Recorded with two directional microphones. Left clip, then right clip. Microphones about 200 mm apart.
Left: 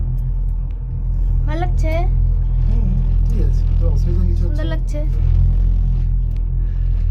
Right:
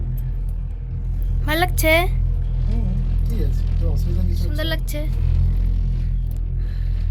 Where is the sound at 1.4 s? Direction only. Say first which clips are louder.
Right 7 dB; 10° right (ahead or behind).